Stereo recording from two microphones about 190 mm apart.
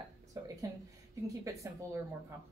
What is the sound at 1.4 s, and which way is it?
Speech, 15° right (ahead or behind).